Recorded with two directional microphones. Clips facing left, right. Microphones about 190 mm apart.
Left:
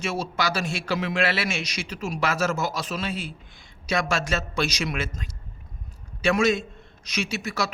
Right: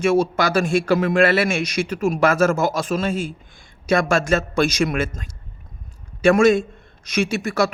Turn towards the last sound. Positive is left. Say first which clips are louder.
# right 8 dB
turn(degrees=-50)  # may be behind; listen again after turning